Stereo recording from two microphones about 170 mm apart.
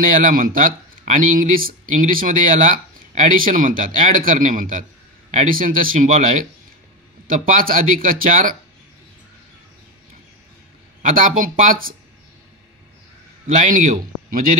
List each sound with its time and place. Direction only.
0.2 s speech: 55° right (ahead or behind)
7.2 s speech: 55° right (ahead or behind)
11.0 s speech: 50° right (ahead or behind)
13.7 s speech: 50° right (ahead or behind)